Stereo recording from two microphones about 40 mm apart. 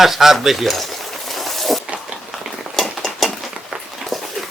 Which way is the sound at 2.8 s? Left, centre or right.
Centre.